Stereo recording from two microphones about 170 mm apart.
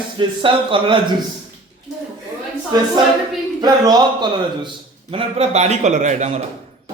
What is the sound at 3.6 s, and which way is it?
A man's voice, 25° right (ahead or behind).